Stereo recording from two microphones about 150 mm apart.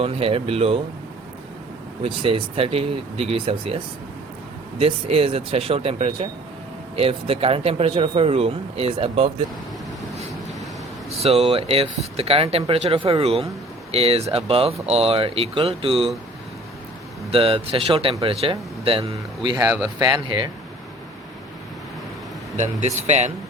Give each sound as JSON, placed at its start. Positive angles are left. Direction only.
{"t": 0.0, "sound": "speech", "side_deg": -40}
{"t": 2.0, "sound": "speech", "side_deg": -35}
{"t": 4.8, "sound": "speech", "side_deg": -40}
{"t": 11.2, "sound": "speech", "side_deg": -40}
{"t": 17.3, "sound": "speech", "side_deg": -35}
{"t": 19.6, "sound": "speech", "side_deg": -10}
{"t": 20.0, "sound": "speech", "side_deg": -25}
{"t": 22.5, "sound": "speech", "side_deg": -50}